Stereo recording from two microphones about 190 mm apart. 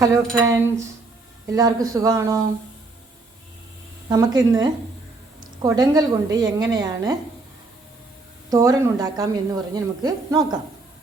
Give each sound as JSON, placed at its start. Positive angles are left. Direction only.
{"t": 0.3, "sound": "speech", "side_deg": -15}
{"t": 4.1, "sound": "a woman's voice", "side_deg": -20}
{"t": 8.4, "sound": "a woman's voice", "side_deg": -15}